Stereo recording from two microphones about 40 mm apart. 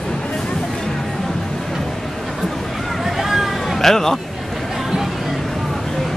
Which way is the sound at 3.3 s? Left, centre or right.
Centre.